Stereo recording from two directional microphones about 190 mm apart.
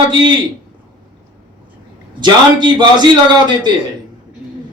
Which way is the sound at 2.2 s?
25° right (ahead or behind).